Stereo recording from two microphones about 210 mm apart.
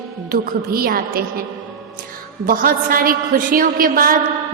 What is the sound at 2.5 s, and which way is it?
A woman's voice, 40° right (ahead or behind).